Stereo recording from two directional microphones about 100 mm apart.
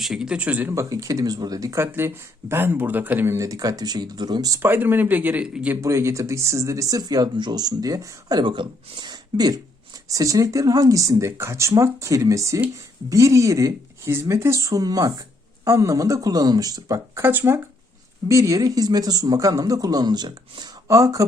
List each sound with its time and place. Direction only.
0.0 s speech: 5° right (ahead or behind)
0.7 s speech: 30° right (ahead or behind)
3.3 s speech: 35° right (ahead or behind)
4.6 s speech: 20° right (ahead or behind)
5.8 s speech: 30° right (ahead or behind)
17.2 s speech: 20° right (ahead or behind); by 20.7 s 45° right (ahead or behind)
20.8 s speech: 35° right (ahead or behind)